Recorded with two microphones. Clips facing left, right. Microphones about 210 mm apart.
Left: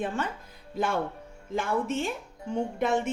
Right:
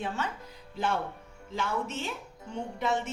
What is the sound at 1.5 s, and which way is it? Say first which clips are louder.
Speech: left 5 dB; 50° left (ahead or behind).